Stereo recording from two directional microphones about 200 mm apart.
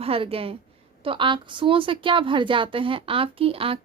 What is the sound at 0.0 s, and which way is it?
A woman's voice, 30° right (ahead or behind).